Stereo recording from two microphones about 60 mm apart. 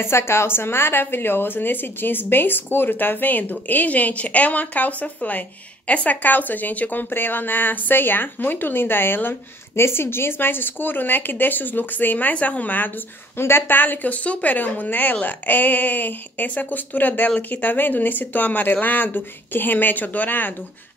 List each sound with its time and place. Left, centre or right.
0.0 s a woman's voice: left